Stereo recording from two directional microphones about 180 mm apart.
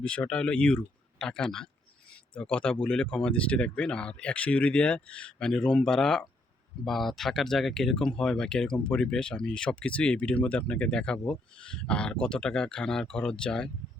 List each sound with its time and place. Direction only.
0.0 s speech: 5° left (ahead or behind)